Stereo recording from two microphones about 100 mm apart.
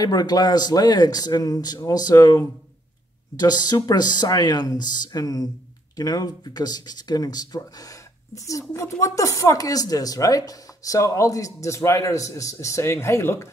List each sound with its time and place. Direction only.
0.0 s speech: 40° left (ahead or behind)